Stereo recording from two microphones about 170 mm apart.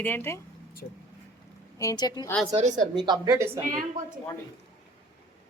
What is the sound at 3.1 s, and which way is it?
Speech, 20° right (ahead or behind).